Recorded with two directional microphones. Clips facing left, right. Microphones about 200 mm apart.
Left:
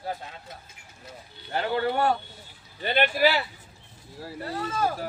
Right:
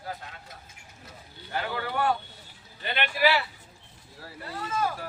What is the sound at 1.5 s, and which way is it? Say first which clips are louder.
Speech: left 5 dB; 30° left (ahead or behind).